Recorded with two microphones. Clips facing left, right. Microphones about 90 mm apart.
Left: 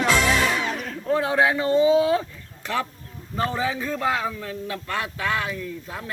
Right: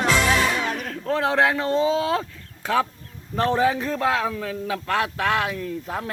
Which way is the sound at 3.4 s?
55° right (ahead or behind).